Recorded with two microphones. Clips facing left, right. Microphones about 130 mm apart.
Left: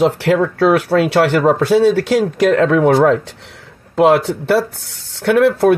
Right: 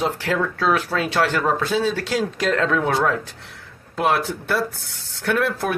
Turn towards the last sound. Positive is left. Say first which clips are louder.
# left 10 dB
turn(degrees=65)  # may be behind; listen again after turning